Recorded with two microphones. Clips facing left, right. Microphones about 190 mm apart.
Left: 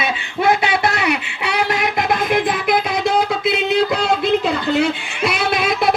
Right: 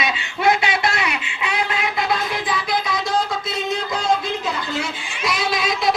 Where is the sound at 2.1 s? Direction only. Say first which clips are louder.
Left 5 dB; 55° left (ahead or behind).